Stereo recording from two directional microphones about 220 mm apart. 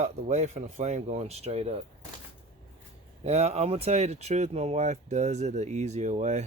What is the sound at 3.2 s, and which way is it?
Speech, 30° right (ahead or behind).